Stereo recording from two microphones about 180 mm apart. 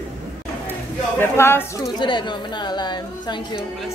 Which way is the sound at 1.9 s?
25° left (ahead or behind).